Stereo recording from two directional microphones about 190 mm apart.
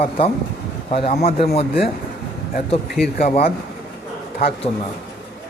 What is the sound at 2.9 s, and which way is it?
Speech, centre (ahead or behind).